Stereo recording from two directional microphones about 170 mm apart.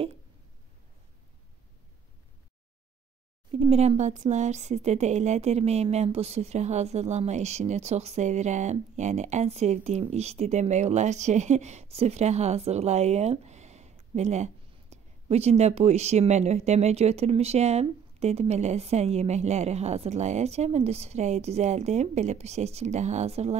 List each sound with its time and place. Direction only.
3.5 s speech: 35° right (ahead or behind)